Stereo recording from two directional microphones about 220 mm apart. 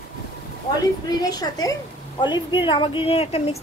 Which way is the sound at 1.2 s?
15° left (ahead or behind).